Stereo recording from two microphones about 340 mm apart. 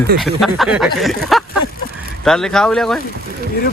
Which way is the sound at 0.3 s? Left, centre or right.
Centre.